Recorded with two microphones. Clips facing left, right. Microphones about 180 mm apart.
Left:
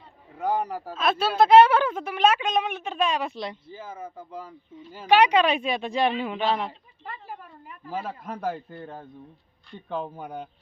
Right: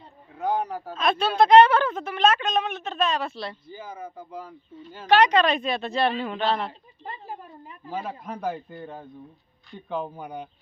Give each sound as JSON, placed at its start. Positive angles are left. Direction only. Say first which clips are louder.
{"t": 0.3, "sound": "speech", "louder": "even", "side_deg": 10}
{"t": 3.7, "sound": "speech", "louder": "even", "side_deg": 5}
{"t": 7.0, "sound": "a woman's voice", "louder": "right 2 dB", "side_deg": -25}
{"t": 7.9, "sound": "speech", "louder": "even", "side_deg": 5}